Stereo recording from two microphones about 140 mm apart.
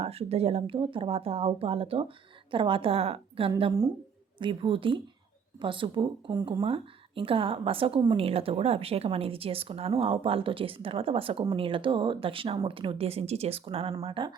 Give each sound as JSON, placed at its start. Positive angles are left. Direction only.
{"t": 0.0, "sound": "speech", "side_deg": -45}
{"t": 3.6, "sound": "speech", "side_deg": -30}